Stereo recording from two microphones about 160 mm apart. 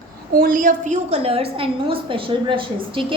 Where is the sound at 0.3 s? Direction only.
60° right (ahead or behind).